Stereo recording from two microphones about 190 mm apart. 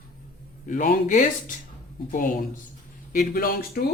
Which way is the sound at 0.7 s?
40° left (ahead or behind).